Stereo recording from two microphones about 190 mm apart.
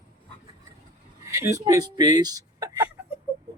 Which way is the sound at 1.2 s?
15° right (ahead or behind).